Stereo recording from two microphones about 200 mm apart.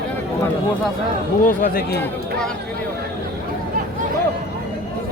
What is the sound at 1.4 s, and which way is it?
Speech, 45° left (ahead or behind).